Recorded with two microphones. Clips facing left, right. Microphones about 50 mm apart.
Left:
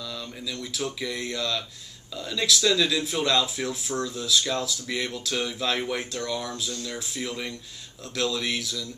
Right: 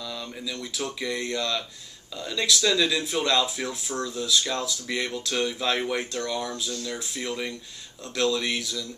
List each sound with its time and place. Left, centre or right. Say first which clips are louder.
0.1 s speech: right 1 dB; centre